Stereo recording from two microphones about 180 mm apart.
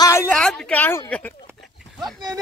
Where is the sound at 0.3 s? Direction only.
5° left (ahead or behind).